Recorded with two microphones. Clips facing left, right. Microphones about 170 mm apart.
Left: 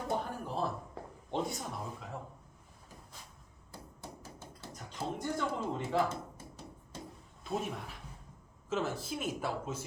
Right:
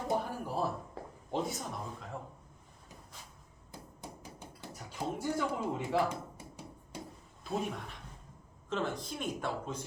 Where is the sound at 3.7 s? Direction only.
15° right (ahead or behind).